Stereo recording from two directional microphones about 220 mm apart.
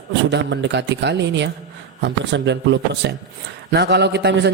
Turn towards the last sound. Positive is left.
turn(degrees=-50)  # may be behind; listen again after turning